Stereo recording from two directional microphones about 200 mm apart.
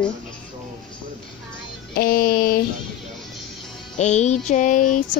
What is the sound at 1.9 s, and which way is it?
Music, 50° left (ahead or behind).